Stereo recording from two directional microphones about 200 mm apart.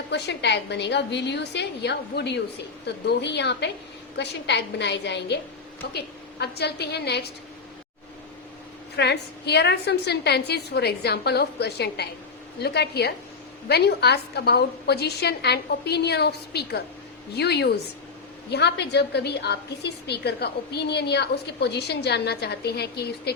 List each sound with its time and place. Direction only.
0.1 s a woman's voice: 60° left (ahead or behind)
9.0 s a woman's voice: 55° left (ahead or behind)